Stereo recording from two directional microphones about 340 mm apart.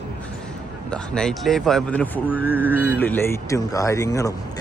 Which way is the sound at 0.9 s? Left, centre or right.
Centre.